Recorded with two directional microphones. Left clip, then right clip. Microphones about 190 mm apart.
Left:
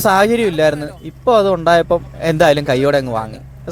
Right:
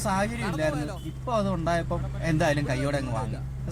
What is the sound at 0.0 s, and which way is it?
A man's voice, 40° left (ahead or behind).